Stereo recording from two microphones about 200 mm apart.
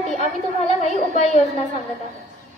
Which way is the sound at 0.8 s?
35° left (ahead or behind).